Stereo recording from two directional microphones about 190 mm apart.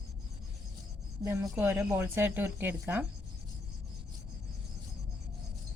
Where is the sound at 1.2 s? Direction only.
10° right (ahead or behind).